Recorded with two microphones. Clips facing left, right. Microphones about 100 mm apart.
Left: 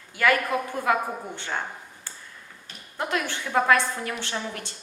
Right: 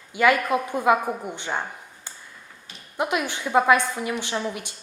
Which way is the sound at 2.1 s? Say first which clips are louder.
Right 2 dB; 20° right (ahead or behind).